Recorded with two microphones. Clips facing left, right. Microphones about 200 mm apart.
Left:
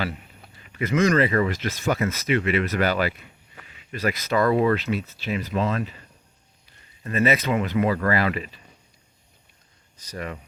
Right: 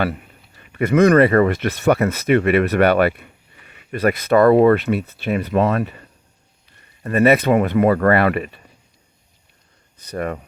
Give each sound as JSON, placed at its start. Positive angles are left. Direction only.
{"t": 0.7, "sound": "speech", "side_deg": -60}
{"t": 7.0, "sound": "speech", "side_deg": -60}
{"t": 10.0, "sound": "speech", "side_deg": -55}